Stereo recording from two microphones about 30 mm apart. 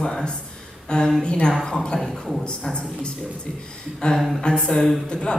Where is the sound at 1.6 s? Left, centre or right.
Centre.